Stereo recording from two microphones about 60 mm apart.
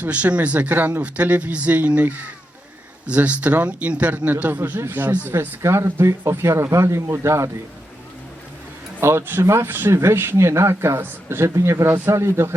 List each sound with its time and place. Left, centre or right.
0.0 s speech: right
5.4 s speech: right
9.0 s speech: right